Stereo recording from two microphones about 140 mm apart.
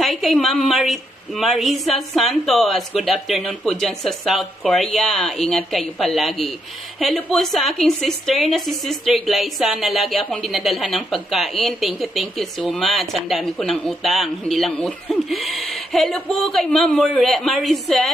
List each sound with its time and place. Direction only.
0.0 s a woman's voice: centre (ahead or behind)